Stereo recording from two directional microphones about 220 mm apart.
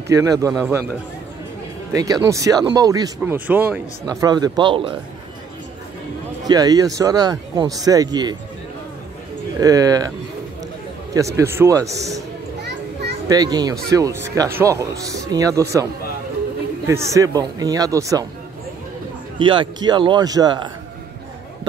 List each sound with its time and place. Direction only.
0.1 s speech: 15° right (ahead or behind)
1.9 s speech: 15° right (ahead or behind)
6.4 s speech: 15° right (ahead or behind)
9.6 s speech: 15° right (ahead or behind)
11.1 s speech: 15° right (ahead or behind)
13.3 s speech: 20° right (ahead or behind)
19.3 s a man's voice: 20° right (ahead or behind)